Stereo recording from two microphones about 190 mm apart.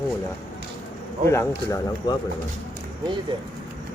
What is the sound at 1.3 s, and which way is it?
Speech, 15° left (ahead or behind).